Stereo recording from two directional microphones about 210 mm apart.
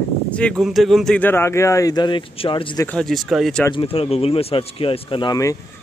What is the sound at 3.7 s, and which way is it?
Speech, 25° left (ahead or behind).